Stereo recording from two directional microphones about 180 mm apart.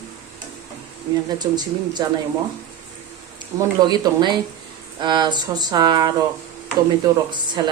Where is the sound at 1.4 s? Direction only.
25° right (ahead or behind).